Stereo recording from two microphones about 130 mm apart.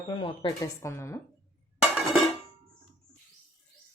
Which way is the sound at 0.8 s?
20° left (ahead or behind).